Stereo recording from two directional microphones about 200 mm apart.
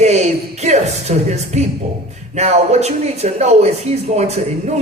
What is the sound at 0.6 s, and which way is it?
Speech, 35° right (ahead or behind).